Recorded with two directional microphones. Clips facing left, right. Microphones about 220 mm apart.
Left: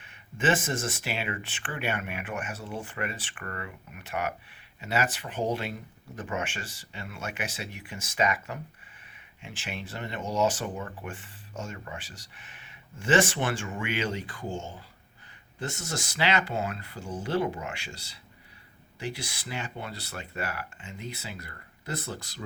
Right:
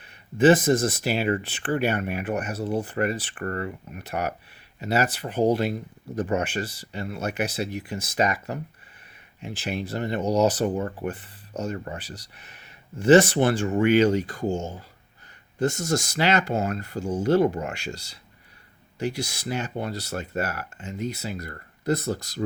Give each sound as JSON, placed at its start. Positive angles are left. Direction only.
{"t": 0.0, "sound": "speech", "side_deg": -35}